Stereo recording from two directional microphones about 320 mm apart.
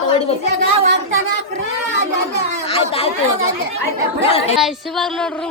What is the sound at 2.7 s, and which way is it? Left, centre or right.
Speech, centre.